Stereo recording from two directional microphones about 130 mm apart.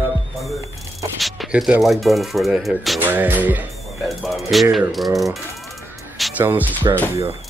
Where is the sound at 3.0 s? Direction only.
15° right (ahead or behind).